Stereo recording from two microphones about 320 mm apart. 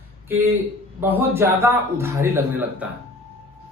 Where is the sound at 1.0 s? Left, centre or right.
Centre.